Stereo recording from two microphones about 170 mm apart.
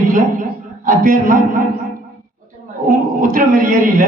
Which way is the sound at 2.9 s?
55° right (ahead or behind).